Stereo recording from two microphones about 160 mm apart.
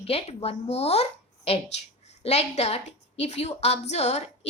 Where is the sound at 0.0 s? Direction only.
40° left (ahead or behind).